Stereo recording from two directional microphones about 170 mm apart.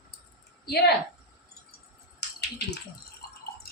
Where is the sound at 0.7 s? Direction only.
70° left (ahead or behind).